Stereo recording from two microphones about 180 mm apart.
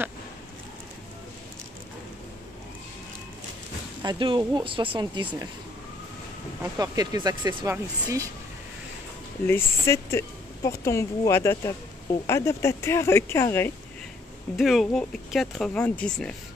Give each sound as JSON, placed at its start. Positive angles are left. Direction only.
{"t": 4.0, "sound": "speech", "side_deg": -25}
{"t": 6.8, "sound": "speech", "side_deg": -20}
{"t": 9.5, "sound": "a woman's voice", "side_deg": 15}
{"t": 14.6, "sound": "speech", "side_deg": 0}